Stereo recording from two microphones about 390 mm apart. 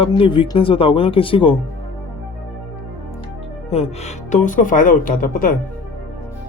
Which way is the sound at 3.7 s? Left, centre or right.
Centre.